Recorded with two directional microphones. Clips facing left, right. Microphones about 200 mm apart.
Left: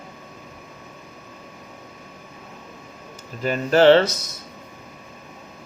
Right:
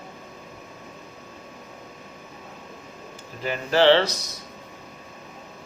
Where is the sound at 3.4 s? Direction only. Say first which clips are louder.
Left 4 dB; 45° left (ahead or behind).